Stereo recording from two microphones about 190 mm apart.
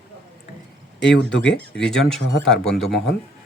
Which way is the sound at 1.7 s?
5° left (ahead or behind).